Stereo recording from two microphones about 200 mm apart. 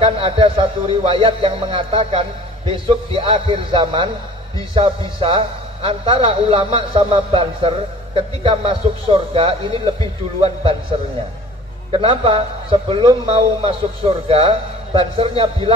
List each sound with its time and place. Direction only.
0.0 s a man's voice: 25° right (ahead or behind)
11.9 s a man's voice: 25° right (ahead or behind)